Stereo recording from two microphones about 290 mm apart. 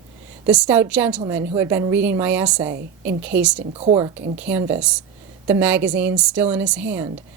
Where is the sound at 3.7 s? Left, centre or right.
Right.